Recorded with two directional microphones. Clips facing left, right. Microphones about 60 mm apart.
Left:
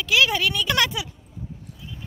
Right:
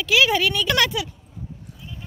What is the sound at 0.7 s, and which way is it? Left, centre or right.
Speech, centre.